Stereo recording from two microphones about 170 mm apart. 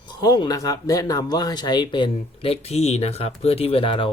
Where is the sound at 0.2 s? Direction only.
25° left (ahead or behind).